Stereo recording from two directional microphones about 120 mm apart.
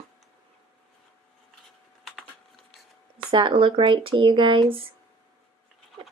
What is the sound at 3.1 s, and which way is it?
Speech, 45° right (ahead or behind).